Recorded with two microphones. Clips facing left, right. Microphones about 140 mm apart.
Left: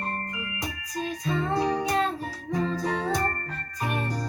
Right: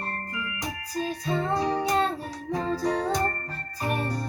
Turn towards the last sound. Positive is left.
turn(degrees=-35)  # may be behind; listen again after turning